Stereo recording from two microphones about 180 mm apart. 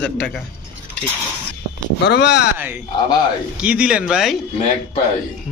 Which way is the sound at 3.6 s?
5° right (ahead or behind).